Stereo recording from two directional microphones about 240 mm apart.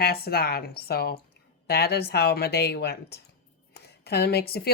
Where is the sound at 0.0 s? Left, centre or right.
Left.